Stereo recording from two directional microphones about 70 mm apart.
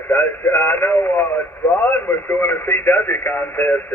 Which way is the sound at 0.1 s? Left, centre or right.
Left.